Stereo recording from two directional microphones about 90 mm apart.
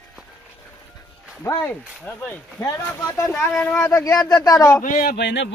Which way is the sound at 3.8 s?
35° left (ahead or behind).